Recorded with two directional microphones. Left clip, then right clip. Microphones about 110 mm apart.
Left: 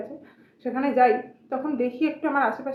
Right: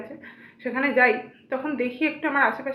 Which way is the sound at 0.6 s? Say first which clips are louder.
Even; 35° left (ahead or behind).